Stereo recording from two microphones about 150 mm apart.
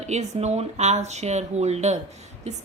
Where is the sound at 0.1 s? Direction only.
50° right (ahead or behind).